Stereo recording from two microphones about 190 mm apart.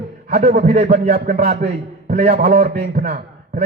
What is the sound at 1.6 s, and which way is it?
A man's voice, 35° right (ahead or behind).